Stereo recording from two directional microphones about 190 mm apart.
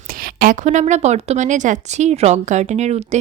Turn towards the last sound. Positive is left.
turn(degrees=-35)  # may be behind; listen again after turning